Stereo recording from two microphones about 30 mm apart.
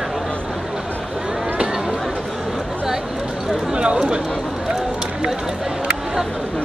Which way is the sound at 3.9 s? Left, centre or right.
Right.